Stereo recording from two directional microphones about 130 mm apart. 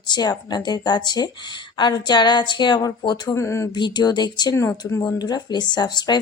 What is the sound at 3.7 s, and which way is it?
A woman's voice, 35° left (ahead or behind).